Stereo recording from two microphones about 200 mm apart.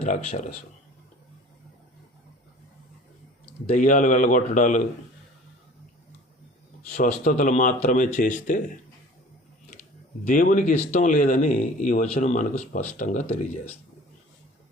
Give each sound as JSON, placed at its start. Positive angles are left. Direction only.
{"t": 0.0, "sound": "speech", "side_deg": 40}
{"t": 3.7, "sound": "speech", "side_deg": 40}
{"t": 7.3, "sound": "speech", "side_deg": 40}
{"t": 10.2, "sound": "speech", "side_deg": 45}